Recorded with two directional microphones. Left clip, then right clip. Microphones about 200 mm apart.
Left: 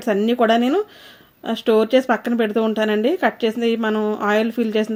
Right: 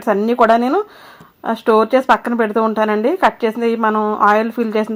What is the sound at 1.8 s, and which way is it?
Speech, 35° right (ahead or behind).